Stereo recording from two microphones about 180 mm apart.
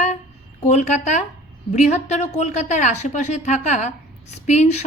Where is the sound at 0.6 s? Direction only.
40° left (ahead or behind).